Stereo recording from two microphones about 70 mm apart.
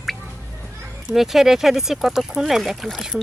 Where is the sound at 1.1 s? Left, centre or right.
Centre.